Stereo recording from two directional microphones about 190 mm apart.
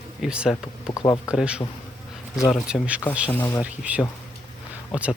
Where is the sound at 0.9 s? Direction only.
20° left (ahead or behind).